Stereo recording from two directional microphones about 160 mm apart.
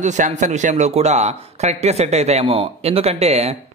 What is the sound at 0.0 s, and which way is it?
A man's voice, 50° right (ahead or behind).